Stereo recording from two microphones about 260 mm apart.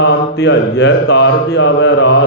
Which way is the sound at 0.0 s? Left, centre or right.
Left.